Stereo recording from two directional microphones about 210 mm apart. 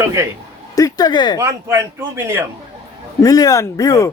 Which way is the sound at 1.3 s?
15° right (ahead or behind).